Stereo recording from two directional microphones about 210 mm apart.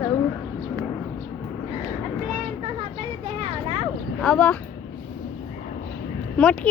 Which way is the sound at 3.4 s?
25° right (ahead or behind).